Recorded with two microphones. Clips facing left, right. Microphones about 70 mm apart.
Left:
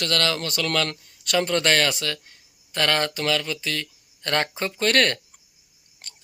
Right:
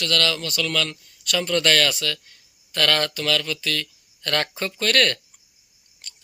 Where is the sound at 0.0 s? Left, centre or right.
Left.